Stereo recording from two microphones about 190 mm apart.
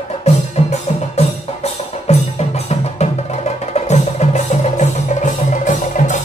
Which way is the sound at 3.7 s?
35° left (ahead or behind).